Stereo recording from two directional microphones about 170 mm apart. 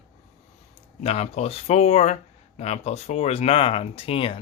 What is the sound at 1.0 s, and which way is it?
Speech, 40° left (ahead or behind).